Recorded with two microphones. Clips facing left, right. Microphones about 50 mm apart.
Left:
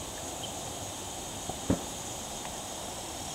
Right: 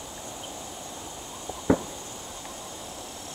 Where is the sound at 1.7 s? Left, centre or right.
Right.